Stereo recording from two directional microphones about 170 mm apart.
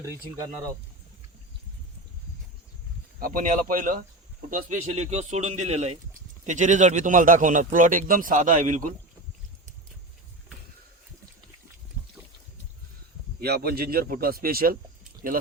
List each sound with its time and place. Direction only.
3.2 s a man's voice: 55° right (ahead or behind)
13.4 s a man's voice: 65° right (ahead or behind)